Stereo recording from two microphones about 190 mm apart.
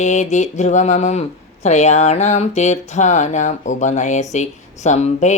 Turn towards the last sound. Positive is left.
turn(degrees=35)  # may be behind; listen again after turning